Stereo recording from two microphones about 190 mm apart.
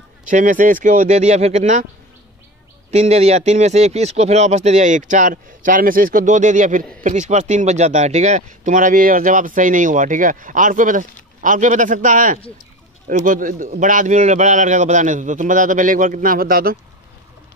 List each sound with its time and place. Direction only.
0.3 s speech: 45° right (ahead or behind)
2.9 s speech: 35° right (ahead or behind); by 16.7 s 50° right (ahead or behind)